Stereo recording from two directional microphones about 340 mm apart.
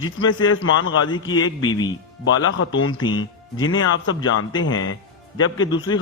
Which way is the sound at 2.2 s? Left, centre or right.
Left.